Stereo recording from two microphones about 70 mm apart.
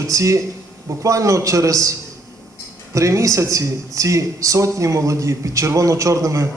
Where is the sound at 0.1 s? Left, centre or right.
Right.